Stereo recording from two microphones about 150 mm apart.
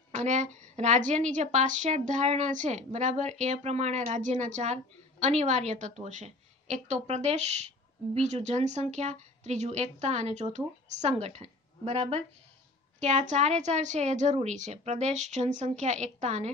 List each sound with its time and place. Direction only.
0.1 s a woman's voice: 50° right (ahead or behind)